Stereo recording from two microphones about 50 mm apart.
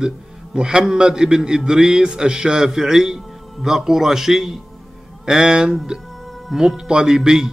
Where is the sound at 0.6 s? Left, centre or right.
Centre.